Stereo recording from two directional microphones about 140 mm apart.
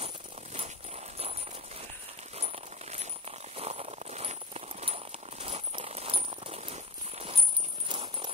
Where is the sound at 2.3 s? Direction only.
50° right (ahead or behind).